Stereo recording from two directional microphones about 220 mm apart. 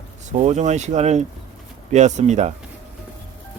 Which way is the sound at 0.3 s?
30° right (ahead or behind).